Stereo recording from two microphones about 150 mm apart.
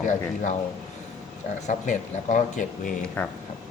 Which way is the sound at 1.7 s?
55° left (ahead or behind).